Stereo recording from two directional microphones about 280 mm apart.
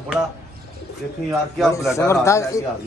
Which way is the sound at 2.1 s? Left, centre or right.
Centre.